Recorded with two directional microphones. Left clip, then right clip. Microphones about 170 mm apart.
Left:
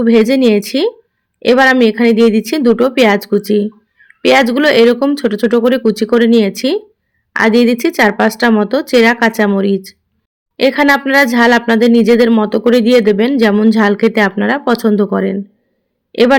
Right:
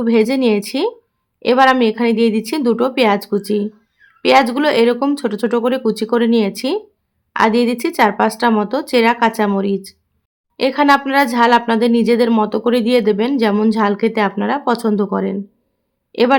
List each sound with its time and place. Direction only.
0.0 s speech: 15° left (ahead or behind)